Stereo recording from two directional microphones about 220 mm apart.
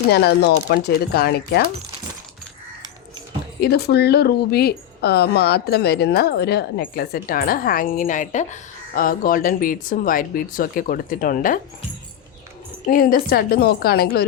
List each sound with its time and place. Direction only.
0.1 s speech: 50° left (ahead or behind)
3.6 s speech: 45° left (ahead or behind)
12.9 s speech: 40° left (ahead or behind)